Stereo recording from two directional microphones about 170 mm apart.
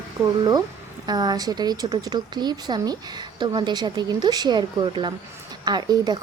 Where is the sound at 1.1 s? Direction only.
25° right (ahead or behind).